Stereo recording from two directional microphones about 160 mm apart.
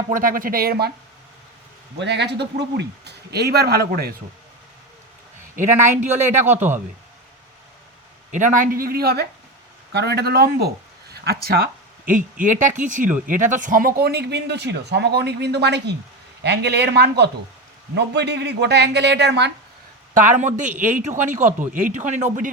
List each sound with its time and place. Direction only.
0.1 s speech: 60° right (ahead or behind); by 0.9 s 80° right
2.0 s speech: 90° right; by 4.1 s 75° right (ahead or behind)
6.4 s speech: 15° right (ahead or behind)
8.3 s speech: 50° right (ahead or behind); by 9.2 s 80° right
9.9 s speech: 90° right
20.1 s speech: 50° right (ahead or behind)